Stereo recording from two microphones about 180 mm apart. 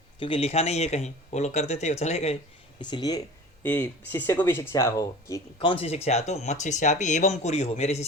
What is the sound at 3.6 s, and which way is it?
Speech, 10° left (ahead or behind).